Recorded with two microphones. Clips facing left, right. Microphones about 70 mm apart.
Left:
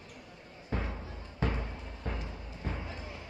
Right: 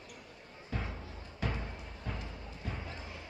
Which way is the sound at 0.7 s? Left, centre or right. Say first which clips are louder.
Left 4 dB; left.